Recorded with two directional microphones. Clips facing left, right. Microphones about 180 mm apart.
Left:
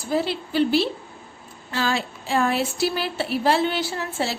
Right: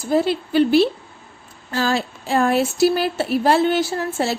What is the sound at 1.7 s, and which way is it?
A woman's voice, 40° right (ahead or behind).